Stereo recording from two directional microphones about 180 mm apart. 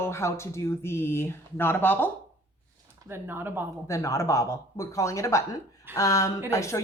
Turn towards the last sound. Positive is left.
turn(degrees=15)  # may be behind; listen again after turning